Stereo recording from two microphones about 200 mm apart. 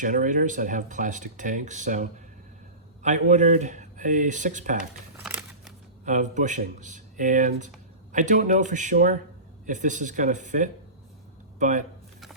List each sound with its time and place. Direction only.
0.0 s speech: 40° right (ahead or behind)
5.1 s crumpling: 10° right (ahead or behind)
6.1 s speech: 40° right (ahead or behind)